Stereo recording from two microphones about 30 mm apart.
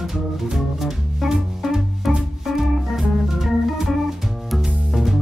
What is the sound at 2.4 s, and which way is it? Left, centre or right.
Organ, centre.